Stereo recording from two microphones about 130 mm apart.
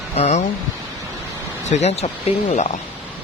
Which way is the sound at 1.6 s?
60° left (ahead or behind).